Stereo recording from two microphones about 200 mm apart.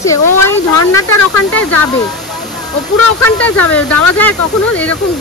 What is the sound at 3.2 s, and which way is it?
Speech, 5° left (ahead or behind).